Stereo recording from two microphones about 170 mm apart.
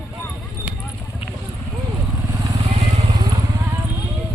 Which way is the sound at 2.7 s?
35° right (ahead or behind).